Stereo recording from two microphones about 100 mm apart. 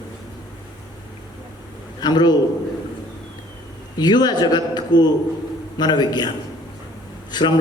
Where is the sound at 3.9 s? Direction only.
45° left (ahead or behind).